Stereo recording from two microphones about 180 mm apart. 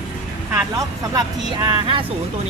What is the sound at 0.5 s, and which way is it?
Speech, 20° right (ahead or behind).